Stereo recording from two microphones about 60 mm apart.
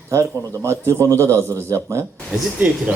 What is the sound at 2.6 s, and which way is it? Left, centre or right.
Speech, right.